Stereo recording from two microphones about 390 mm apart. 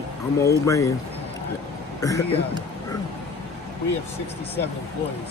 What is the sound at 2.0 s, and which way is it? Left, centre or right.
Speech, centre.